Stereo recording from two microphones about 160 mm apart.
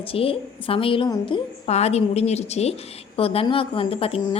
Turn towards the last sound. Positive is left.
turn(degrees=35)  # may be behind; listen again after turning